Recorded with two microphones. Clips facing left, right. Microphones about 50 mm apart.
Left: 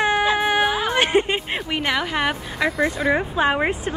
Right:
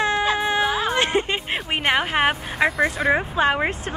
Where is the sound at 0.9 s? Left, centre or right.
Left.